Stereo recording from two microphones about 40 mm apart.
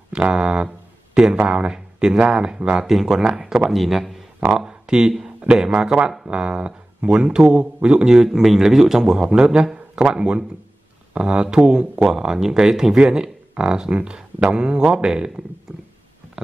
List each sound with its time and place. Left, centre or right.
0.3 s a sound: right
1.1 s a man's voice: right
2.9 s speech: centre
4.5 s a man's voice: centre